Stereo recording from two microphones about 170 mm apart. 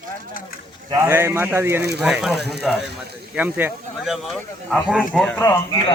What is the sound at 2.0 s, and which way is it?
Speech, 5° right (ahead or behind).